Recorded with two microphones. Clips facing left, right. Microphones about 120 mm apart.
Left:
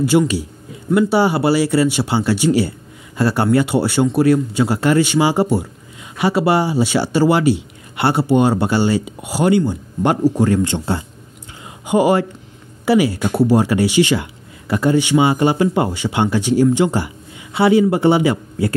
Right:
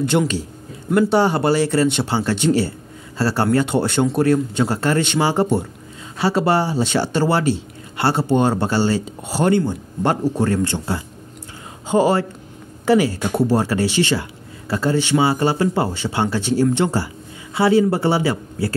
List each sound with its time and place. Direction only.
0.0 s speech: 5° left (ahead or behind)